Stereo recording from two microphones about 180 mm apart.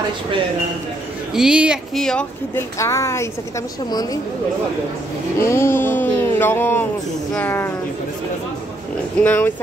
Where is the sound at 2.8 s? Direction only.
15° left (ahead or behind).